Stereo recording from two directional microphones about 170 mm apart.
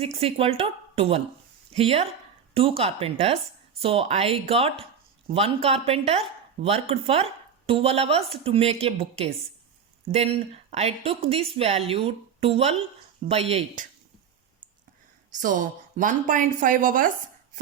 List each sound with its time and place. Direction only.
0.0 s speech: 35° right (ahead or behind)
15.3 s speech: 50° right (ahead or behind)